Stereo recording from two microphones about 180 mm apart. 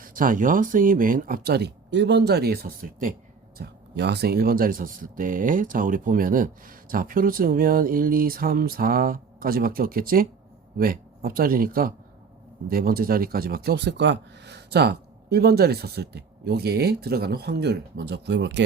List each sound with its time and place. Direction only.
0.0 s speech: 50° right (ahead or behind)
3.6 s speech: 70° right (ahead or behind)